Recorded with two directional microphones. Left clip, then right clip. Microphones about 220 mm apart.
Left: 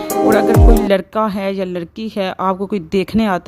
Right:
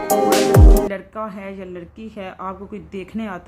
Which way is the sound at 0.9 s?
45° left (ahead or behind).